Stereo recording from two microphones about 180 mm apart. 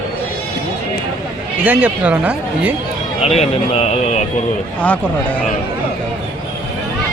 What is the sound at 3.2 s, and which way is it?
Speech, 35° left (ahead or behind).